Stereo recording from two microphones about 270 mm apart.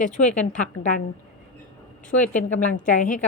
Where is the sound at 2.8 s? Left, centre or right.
Left.